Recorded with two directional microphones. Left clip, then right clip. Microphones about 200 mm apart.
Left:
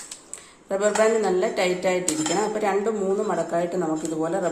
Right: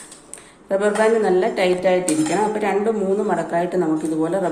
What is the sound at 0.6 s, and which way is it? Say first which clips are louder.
Speech: right 3 dB; 20° left (ahead or behind).